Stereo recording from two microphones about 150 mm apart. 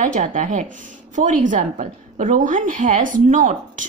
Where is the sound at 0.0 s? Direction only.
55° right (ahead or behind).